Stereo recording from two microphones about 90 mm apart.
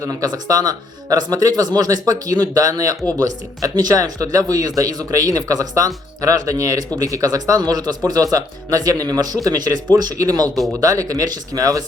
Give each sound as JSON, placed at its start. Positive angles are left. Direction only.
{"t": 0.0, "sound": "speech", "side_deg": -40}